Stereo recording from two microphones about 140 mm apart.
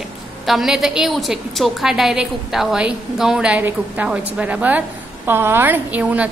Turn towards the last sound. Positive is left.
turn(degrees=-10)  # may be behind; listen again after turning